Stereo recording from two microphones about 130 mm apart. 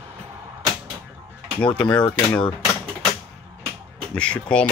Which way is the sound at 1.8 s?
10° left (ahead or behind).